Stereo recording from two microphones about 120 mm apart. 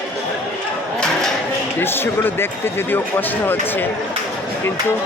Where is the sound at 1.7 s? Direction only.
20° left (ahead or behind).